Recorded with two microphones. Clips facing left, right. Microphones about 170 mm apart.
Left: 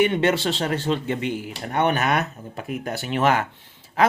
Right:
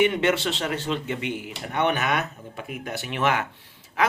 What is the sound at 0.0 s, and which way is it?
Speech, 35° left (ahead or behind).